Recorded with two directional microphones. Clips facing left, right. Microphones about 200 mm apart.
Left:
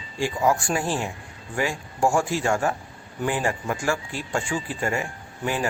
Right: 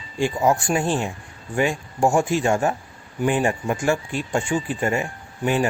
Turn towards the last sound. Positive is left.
turn(degrees=-20)  # may be behind; listen again after turning